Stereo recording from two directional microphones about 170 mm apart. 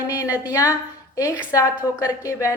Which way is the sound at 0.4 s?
20° left (ahead or behind).